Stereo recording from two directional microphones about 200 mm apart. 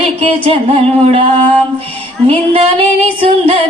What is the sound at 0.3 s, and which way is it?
Music, 30° right (ahead or behind).